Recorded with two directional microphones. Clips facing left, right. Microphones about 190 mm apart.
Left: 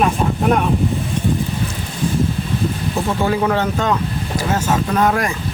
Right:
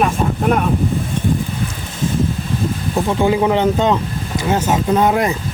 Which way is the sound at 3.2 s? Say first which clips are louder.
Right 4 dB; 15° right (ahead or behind).